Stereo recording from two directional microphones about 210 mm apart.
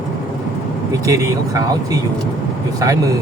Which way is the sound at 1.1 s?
15° right (ahead or behind).